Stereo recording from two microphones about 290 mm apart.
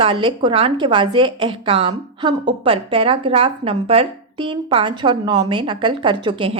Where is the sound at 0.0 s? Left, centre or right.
Centre.